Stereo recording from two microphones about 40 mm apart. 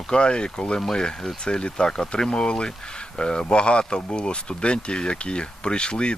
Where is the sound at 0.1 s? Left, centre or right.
Left.